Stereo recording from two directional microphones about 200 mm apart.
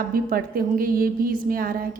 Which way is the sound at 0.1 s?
45° right (ahead or behind).